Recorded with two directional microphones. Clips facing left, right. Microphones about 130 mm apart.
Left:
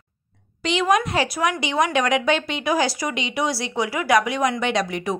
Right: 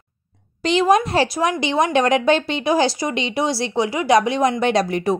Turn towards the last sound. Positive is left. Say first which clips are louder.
# right 5 dB
turn(degrees=-40)  # may be behind; listen again after turning